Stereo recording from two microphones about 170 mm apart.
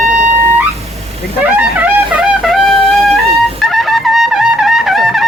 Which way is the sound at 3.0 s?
Centre (ahead or behind).